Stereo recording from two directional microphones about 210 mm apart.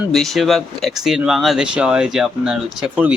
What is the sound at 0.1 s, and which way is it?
Speech, centre (ahead or behind).